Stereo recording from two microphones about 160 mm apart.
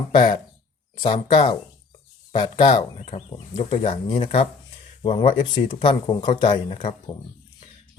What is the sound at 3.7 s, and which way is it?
Speech, 40° left (ahead or behind).